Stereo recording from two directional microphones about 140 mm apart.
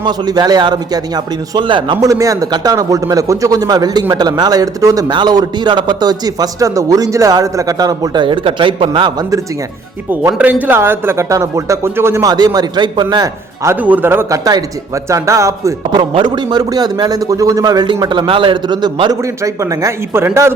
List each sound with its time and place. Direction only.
0.0 s a man's voice: 30° right (ahead or behind)
10.1 s a man's voice: 10° right (ahead or behind); by 13.3 s 30° right (ahead or behind)
13.7 s a man's voice: 15° right (ahead or behind); by 19.1 s 35° right (ahead or behind)
19.4 s a man's voice: 20° right (ahead or behind)